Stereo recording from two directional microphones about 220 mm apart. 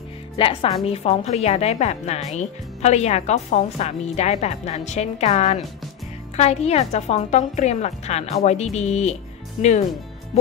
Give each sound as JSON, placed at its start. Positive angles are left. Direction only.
{"t": 0.4, "sound": "speech", "side_deg": 25}